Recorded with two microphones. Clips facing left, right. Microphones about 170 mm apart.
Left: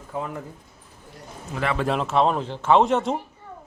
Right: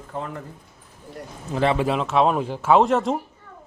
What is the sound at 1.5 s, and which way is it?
Speech, 25° right (ahead or behind).